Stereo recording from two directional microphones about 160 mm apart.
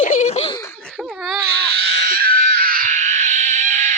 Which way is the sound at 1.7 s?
85° right.